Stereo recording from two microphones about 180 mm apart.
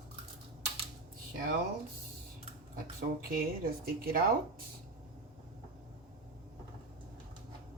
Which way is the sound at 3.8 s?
55° right (ahead or behind).